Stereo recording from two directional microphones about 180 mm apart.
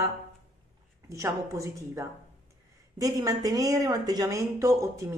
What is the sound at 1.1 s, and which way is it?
A woman's voice, 15° right (ahead or behind).